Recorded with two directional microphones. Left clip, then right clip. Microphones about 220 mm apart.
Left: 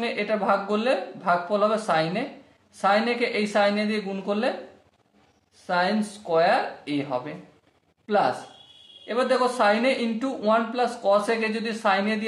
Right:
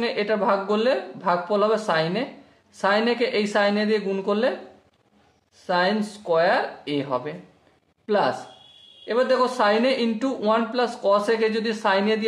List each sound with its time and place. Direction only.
0.0 s a man's voice: 35° right (ahead or behind)
5.7 s a man's voice: 40° right (ahead or behind)